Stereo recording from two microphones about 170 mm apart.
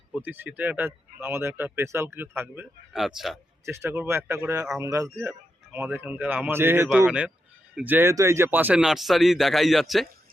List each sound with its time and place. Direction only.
0.1 s speech: 10° right (ahead or behind)
2.9 s speech: centre (ahead or behind)
3.7 s speech: 15° right (ahead or behind)